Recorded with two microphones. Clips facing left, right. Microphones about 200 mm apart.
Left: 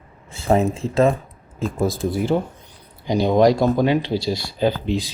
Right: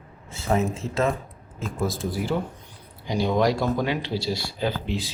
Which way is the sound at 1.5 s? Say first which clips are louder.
Left 6 dB; 30° left (ahead or behind).